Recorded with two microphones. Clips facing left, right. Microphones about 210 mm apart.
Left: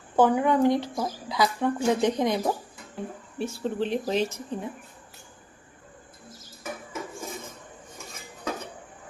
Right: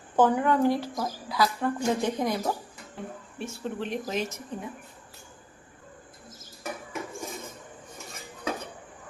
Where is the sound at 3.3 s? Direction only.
35° left (ahead or behind).